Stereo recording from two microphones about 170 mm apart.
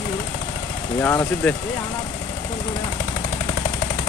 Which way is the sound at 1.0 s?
15° left (ahead or behind).